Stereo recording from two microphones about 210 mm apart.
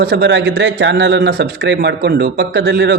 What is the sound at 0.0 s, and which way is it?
A man's voice, 50° right (ahead or behind).